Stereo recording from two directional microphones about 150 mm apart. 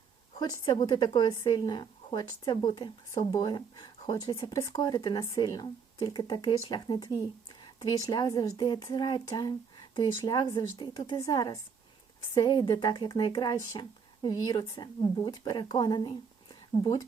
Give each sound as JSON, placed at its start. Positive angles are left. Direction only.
{"t": 0.3, "sound": "a woman's voice", "side_deg": 25}